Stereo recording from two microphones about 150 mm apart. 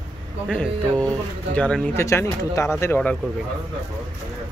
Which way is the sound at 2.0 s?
20° left (ahead or behind).